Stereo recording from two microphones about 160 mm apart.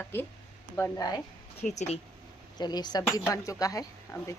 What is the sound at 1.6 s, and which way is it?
Speech, 45° left (ahead or behind).